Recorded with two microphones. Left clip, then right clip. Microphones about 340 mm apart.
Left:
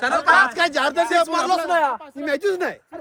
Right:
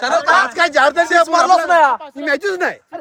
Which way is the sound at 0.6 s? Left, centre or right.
Centre.